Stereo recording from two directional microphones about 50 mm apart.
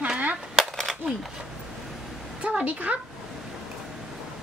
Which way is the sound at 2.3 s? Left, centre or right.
Right.